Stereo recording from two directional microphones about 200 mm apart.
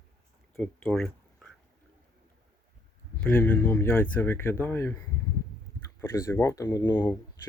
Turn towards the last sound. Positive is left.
turn(degrees=10)  # may be behind; listen again after turning